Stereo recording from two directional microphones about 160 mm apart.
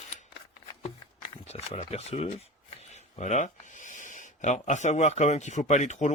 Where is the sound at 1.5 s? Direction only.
40° left (ahead or behind).